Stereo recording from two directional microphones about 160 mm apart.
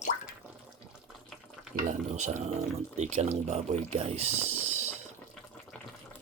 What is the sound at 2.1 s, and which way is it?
Speech, 45° right (ahead or behind).